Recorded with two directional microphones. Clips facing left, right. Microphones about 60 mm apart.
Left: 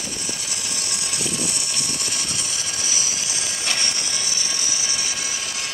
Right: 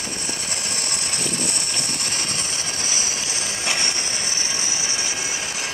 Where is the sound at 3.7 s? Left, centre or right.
Right.